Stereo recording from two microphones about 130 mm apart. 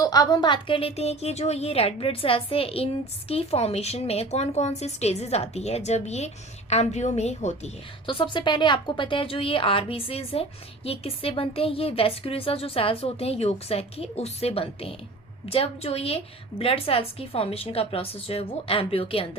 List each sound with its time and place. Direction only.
0.0 s a woman's voice: 30° left (ahead or behind); by 7.7 s 60° left (ahead or behind)
8.0 s a woman's voice: 40° left (ahead or behind)